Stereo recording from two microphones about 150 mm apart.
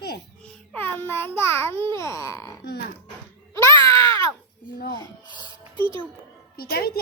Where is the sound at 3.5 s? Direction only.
20° left (ahead or behind).